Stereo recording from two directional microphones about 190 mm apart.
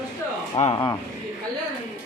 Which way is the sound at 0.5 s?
35° left (ahead or behind).